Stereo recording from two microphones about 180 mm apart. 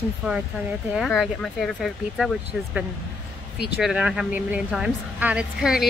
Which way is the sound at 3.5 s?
65° left (ahead or behind).